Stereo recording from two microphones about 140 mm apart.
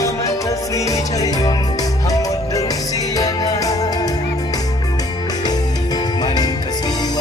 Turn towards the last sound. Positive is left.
turn(degrees=30)  # may be behind; listen again after turning